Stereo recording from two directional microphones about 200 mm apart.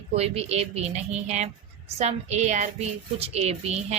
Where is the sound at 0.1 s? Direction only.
30° right (ahead or behind).